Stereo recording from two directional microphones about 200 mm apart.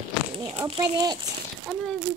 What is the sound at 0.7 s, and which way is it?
Speech, 25° right (ahead or behind).